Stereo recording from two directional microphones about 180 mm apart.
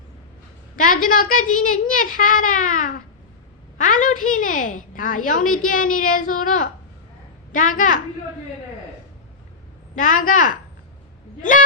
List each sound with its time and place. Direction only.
0.8 s a woman's voice: 50° left (ahead or behind)
9.9 s a woman's voice: 45° left (ahead or behind)